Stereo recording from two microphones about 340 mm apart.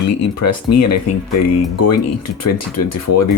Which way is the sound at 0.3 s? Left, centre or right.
Left.